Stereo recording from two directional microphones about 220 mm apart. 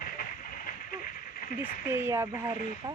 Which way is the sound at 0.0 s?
40° left (ahead or behind).